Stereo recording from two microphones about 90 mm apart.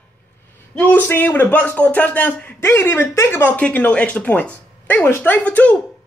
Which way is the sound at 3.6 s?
15° left (ahead or behind).